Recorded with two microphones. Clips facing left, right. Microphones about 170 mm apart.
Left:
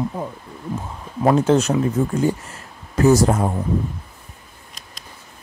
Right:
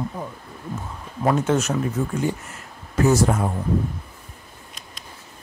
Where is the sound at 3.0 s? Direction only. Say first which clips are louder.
Left 4 dB; 35° left (ahead or behind).